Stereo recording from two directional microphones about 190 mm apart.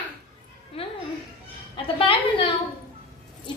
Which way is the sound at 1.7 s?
30° left (ahead or behind).